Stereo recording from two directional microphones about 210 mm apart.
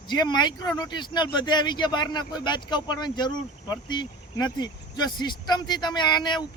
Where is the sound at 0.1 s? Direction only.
20° left (ahead or behind).